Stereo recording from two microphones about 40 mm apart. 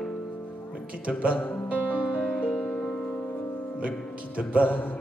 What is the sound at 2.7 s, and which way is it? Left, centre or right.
Music, centre.